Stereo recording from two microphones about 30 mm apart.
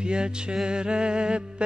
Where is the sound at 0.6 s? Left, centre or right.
Right.